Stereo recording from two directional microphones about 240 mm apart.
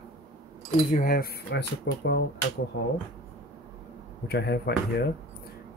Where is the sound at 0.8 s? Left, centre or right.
Left.